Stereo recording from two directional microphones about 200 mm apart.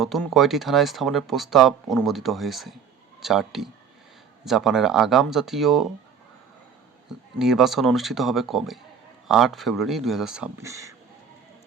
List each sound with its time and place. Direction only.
0.0 s speech: centre (ahead or behind)
7.3 s speech: centre (ahead or behind)
10.6 s speech: 15° right (ahead or behind)